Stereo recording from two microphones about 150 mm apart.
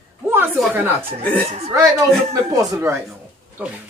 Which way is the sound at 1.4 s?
45° right (ahead or behind).